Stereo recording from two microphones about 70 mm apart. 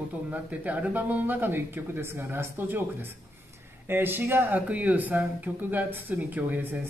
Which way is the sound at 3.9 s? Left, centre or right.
Right.